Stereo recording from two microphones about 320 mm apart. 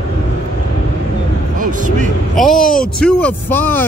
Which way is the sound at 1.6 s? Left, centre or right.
Right.